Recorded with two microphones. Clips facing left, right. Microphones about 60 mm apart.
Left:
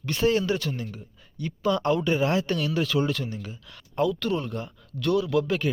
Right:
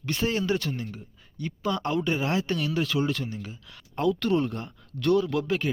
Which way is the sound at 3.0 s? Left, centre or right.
Centre.